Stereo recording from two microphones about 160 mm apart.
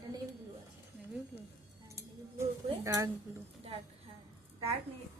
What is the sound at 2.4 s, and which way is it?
Speech, 20° right (ahead or behind).